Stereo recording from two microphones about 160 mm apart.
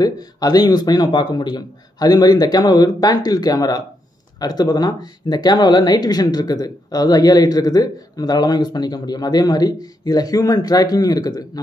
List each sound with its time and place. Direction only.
0.0 s speech: 25° left (ahead or behind)